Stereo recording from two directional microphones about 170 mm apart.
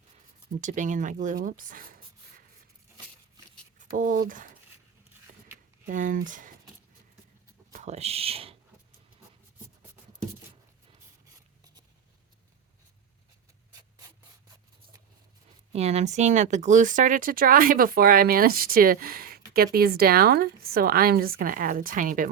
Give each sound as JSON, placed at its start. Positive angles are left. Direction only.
{"t": 0.6, "sound": "speech", "side_deg": -45}
{"t": 3.8, "sound": "speech", "side_deg": -50}
{"t": 5.8, "sound": "speech", "side_deg": -50}
{"t": 7.7, "sound": "speech", "side_deg": -40}
{"t": 15.7, "sound": "speech", "side_deg": -40}